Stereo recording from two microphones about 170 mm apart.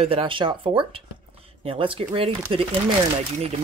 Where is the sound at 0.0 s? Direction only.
35° right (ahead or behind).